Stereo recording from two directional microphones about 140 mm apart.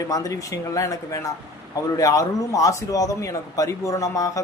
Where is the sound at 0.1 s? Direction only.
25° left (ahead or behind).